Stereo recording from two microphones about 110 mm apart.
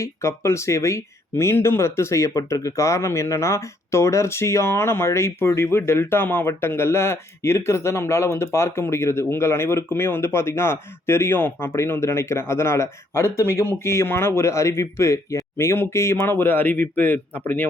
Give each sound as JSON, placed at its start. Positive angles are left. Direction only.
{"t": 0.0, "sound": "speech", "side_deg": 25}